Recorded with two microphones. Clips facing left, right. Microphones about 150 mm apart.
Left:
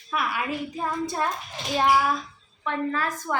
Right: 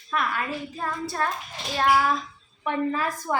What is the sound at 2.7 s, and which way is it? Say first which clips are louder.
Speech: right 1 dB; 15° right (ahead or behind).